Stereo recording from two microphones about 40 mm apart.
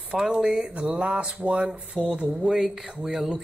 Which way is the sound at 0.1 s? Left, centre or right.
Centre.